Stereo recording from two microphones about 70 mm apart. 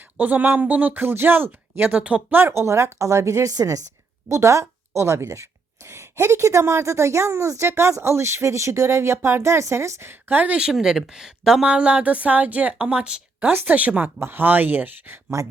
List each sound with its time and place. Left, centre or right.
0.0 s speech: right
2.3 s speech: right
3.5 s a woman's voice: right
4.3 s speech: right
10.7 s a woman's voice: centre
13.5 s speech: right